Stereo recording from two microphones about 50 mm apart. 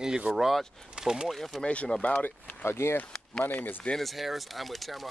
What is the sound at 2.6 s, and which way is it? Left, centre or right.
Speech, left.